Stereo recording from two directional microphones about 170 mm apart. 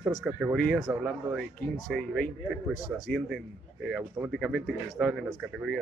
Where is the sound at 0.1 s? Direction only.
5° right (ahead or behind).